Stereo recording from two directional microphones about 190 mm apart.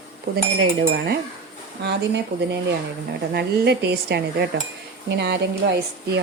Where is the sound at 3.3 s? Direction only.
60° right (ahead or behind).